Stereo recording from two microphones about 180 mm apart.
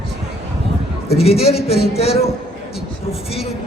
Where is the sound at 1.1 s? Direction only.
35° left (ahead or behind).